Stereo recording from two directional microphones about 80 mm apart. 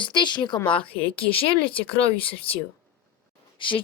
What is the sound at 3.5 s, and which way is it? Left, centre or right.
Speech, left.